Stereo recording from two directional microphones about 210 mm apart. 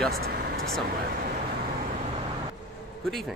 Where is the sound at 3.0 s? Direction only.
Centre (ahead or behind).